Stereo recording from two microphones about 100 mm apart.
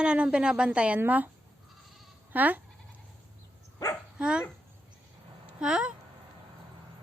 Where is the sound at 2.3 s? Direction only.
15° right (ahead or behind).